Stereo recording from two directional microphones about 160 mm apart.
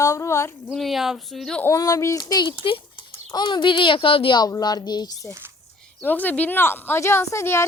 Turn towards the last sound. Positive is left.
turn(degrees=15)  # may be behind; listen again after turning